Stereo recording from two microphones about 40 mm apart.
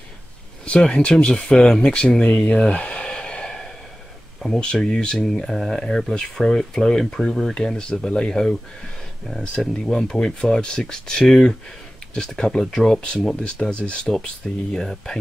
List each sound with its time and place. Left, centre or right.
0.7 s speech: left; by 7.5 s centre
7.5 s speech: centre
9.8 s speech: centre
13.4 s speech: left
14.7 s speech: centre